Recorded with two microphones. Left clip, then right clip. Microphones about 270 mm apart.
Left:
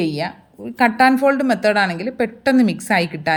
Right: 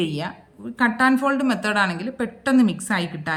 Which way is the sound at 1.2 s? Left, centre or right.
Centre.